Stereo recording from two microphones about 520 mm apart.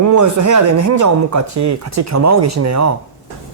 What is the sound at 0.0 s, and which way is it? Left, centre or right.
Speech, right.